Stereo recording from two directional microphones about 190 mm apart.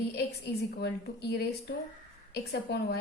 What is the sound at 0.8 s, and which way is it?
A woman's voice, 60° left (ahead or behind).